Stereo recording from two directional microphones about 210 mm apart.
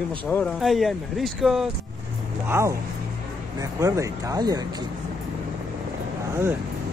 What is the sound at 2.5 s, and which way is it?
Speech, 15° right (ahead or behind).